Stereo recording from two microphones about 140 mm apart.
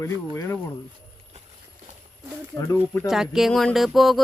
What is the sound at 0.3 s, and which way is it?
Speech, 15° left (ahead or behind).